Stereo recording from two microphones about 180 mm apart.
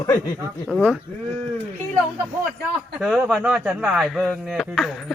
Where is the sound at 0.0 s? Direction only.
20° left (ahead or behind).